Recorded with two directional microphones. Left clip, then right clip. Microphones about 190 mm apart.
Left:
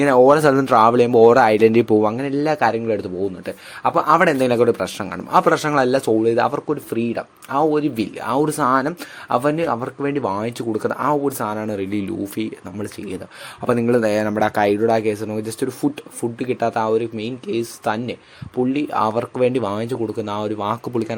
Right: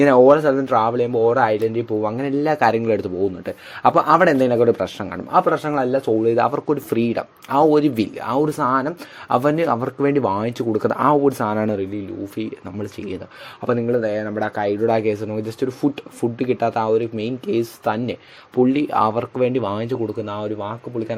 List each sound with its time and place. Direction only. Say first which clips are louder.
0.0 s speech: right 1 dB; 5° right (ahead or behind)
0.4 s speech: left 4 dB; 25° left (ahead or behind)
2.1 s speech: even; centre (ahead or behind)
6.2 s speech: even; centre (ahead or behind)
8.2 s speech: left 2 dB; 5° left (ahead or behind)
9.4 s speech: right 1 dB; 5° right (ahead or behind)
12.4 s speech: left 1 dB; centre (ahead or behind)
13.8 s speech: left 3 dB; 20° left (ahead or behind)
14.8 s speech: left 1 dB; centre (ahead or behind)
20.2 s speech: left 3 dB; 15° left (ahead or behind)